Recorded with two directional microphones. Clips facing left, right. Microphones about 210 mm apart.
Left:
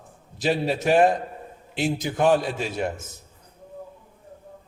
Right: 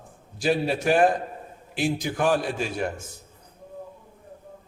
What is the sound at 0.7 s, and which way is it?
A man's voice, 25° left (ahead or behind).